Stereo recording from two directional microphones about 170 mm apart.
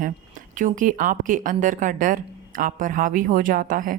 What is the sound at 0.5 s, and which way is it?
Speech, 50° right (ahead or behind).